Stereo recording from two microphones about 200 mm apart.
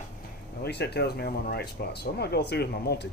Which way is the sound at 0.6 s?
55° left (ahead or behind).